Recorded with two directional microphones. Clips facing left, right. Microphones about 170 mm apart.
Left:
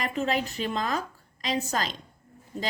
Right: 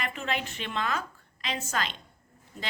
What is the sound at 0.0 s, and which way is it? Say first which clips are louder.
A woman's voice: left 5 dB; 40° left (ahead or behind).